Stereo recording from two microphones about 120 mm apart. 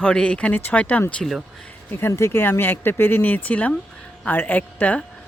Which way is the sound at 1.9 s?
20° left (ahead or behind).